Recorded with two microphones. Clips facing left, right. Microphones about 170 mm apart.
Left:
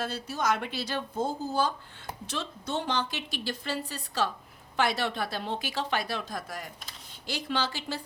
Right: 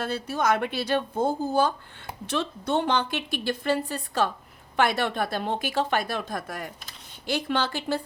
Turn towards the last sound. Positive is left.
turn(degrees=-55)  # may be behind; listen again after turning